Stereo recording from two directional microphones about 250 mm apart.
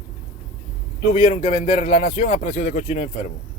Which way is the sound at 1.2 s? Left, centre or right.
Left.